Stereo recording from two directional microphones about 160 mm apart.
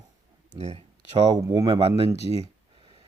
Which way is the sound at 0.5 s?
40° right (ahead or behind).